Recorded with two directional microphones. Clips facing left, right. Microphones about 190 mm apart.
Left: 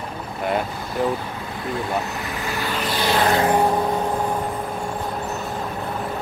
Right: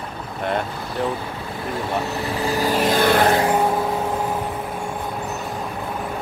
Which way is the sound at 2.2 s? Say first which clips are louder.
Right 6 dB; 35° right (ahead or behind).